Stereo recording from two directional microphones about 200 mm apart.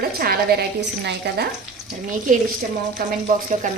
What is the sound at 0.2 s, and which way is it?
A woman's voice, 50° right (ahead or behind).